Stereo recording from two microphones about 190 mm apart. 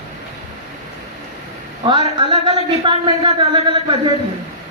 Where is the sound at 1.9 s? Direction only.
25° right (ahead or behind).